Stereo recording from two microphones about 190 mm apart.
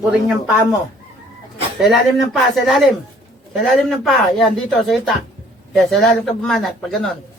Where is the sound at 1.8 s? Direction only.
Centre (ahead or behind).